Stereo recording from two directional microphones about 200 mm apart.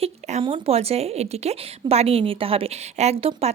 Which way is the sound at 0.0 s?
30° right (ahead or behind).